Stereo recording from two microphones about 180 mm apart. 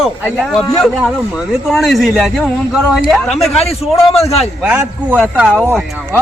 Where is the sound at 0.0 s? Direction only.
Centre (ahead or behind).